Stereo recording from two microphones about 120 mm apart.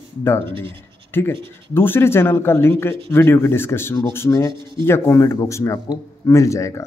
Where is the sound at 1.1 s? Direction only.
20° left (ahead or behind).